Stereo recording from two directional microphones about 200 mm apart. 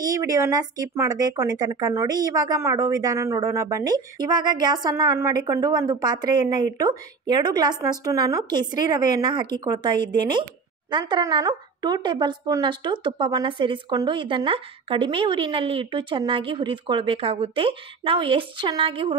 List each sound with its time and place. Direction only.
0.0 s a woman's voice: 15° right (ahead or behind)